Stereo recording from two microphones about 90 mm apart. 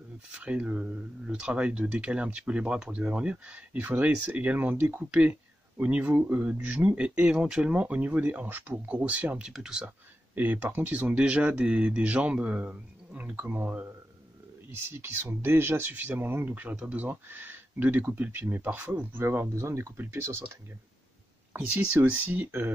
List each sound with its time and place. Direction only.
0.3 s speech: 10° right (ahead or behind)
10.3 s speech: 20° right (ahead or behind)
15.0 s speech: 25° right (ahead or behind)
21.5 s speech: 15° right (ahead or behind)